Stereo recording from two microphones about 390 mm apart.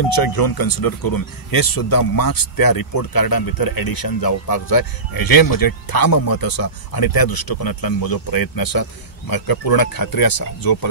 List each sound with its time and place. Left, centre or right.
0.1 s speech: left